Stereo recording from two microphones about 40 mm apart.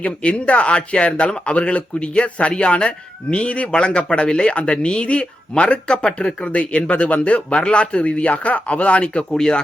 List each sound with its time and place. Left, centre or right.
0.0 s a man's voice: left
9.3 s speech: centre